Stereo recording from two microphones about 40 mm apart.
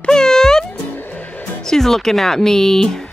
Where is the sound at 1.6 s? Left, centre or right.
Centre.